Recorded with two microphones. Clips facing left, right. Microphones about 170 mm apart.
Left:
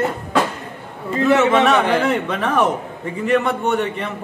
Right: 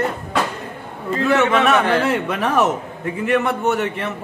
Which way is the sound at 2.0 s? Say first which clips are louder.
Even; 5° right (ahead or behind).